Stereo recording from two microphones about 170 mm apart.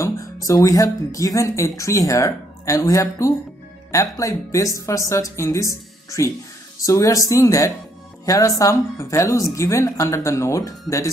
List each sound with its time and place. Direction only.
0.0 s a woman's voice: 20° left (ahead or behind)